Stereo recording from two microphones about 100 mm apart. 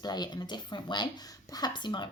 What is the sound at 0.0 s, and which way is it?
Speech, 45° left (ahead or behind).